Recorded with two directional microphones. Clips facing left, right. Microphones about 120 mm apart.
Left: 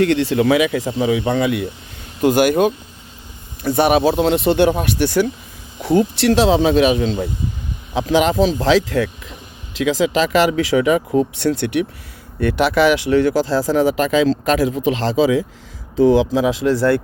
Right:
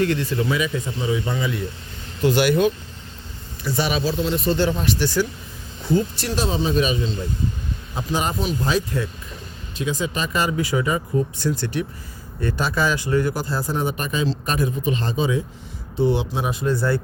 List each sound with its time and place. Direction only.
0.0 s speech: 70° left (ahead or behind)
2.2 s speech: 45° left (ahead or behind)
5.8 s speech: 75° left (ahead or behind)
7.9 s speech: 90° left